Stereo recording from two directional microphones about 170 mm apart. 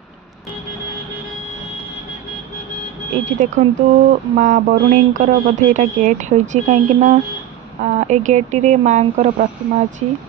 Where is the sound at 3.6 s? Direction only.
50° right (ahead or behind).